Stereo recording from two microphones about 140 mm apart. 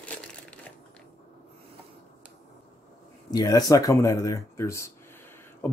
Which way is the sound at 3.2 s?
30° left (ahead or behind).